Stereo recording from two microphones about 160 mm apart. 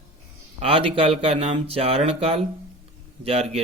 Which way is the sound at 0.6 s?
35° right (ahead or behind).